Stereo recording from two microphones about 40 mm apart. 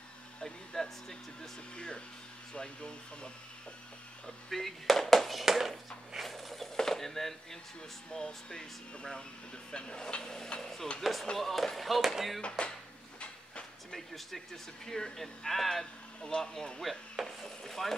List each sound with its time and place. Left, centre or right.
0.4 s a sound: centre
2.5 s speech: left
4.5 s speech: centre
5.4 s a sound: centre
8.1 s speech: centre
12.4 s speech: left
13.9 s speech: centre
17.2 s speech: centre
17.6 s speech: centre